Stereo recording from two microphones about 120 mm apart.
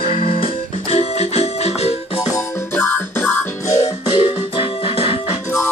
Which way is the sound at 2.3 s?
20° left (ahead or behind).